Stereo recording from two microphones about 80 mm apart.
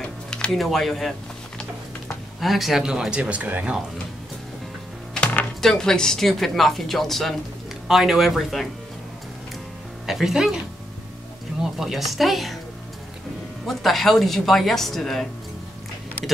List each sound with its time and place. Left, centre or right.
0.0 s music: centre
2.4 s speech: centre
5.1 s music: centre
5.6 s speech: centre
10.0 s speech: centre
11.6 s speech: centre
13.7 s speech: centre